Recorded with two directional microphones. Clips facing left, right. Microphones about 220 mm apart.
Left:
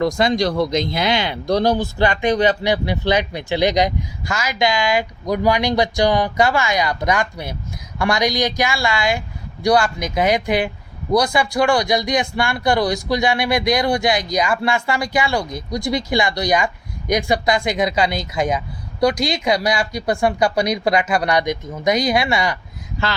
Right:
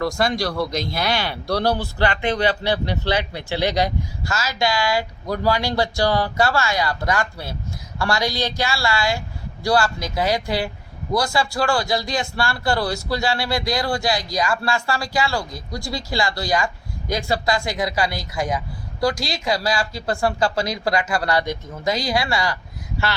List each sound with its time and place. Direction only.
0.0 s speech: 20° left (ahead or behind)